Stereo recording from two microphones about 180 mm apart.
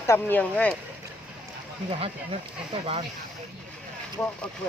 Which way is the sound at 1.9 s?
30° right (ahead or behind).